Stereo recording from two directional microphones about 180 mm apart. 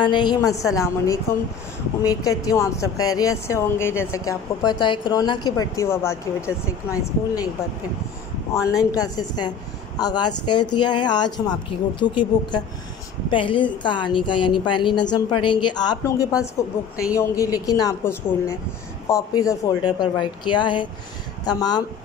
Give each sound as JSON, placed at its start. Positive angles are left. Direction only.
{"t": 0.0, "sound": "speech", "side_deg": 25}
{"t": 8.5, "sound": "a woman's voice", "side_deg": 20}